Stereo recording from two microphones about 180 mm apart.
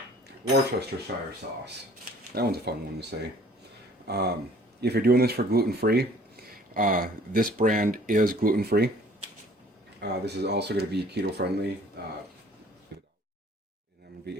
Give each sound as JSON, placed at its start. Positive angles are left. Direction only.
{"t": 0.3, "sound": "speech", "side_deg": -65}
{"t": 2.3, "sound": "speech", "side_deg": -60}
{"t": 10.0, "sound": "speech", "side_deg": -70}